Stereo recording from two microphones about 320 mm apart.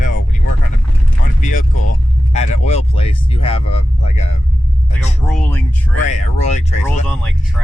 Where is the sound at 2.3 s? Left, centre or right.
Left.